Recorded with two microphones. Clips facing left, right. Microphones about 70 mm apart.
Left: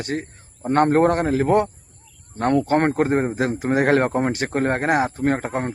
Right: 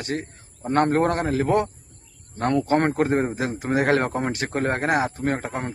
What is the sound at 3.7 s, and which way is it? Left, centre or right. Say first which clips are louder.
A man's voice: left 2 dB; left.